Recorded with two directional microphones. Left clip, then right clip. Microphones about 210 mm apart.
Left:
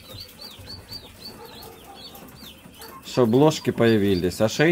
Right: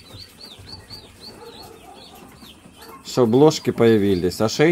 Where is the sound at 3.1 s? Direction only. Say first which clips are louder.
Right 3 dB; 5° right (ahead or behind).